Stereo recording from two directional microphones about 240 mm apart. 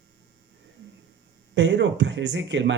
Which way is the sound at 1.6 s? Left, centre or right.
Right.